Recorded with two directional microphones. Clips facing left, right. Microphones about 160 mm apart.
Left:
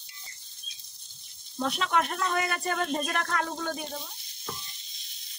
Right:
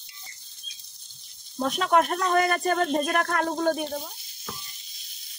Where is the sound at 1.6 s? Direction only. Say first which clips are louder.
Right 5 dB; 45° right (ahead or behind).